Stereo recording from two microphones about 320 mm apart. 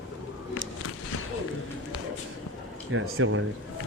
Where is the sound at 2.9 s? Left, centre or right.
Right.